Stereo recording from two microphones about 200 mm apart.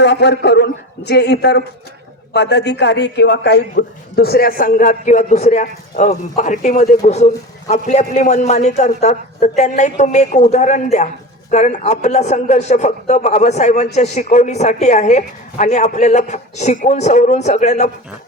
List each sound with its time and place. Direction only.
0.0 s a man's voice: 60° left (ahead or behind); by 17.9 s 35° left (ahead or behind)